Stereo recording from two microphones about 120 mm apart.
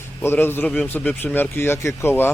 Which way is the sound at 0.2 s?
20° left (ahead or behind).